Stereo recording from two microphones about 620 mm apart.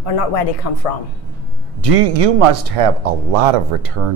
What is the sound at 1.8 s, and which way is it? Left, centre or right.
Speech, right.